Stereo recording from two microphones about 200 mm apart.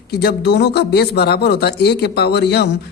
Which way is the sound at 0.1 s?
55° left (ahead or behind).